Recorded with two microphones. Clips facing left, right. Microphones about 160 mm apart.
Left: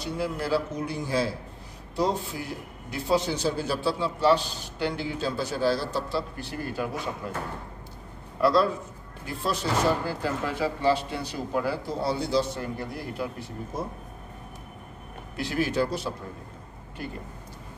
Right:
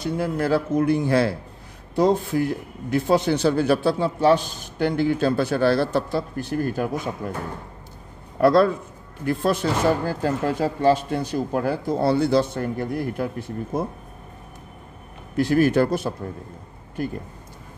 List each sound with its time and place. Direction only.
0.0 s speech: 55° right (ahead or behind)
15.3 s speech: 45° right (ahead or behind)